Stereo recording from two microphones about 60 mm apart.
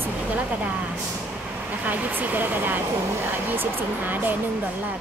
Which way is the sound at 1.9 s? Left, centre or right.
Right.